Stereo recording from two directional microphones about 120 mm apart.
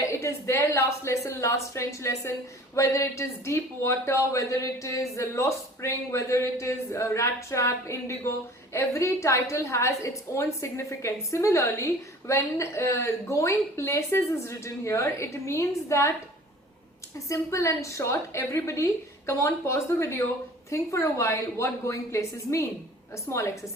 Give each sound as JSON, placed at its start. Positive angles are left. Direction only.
{"t": 0.0, "sound": "speech", "side_deg": 25}
{"t": 17.2, "sound": "speech", "side_deg": 25}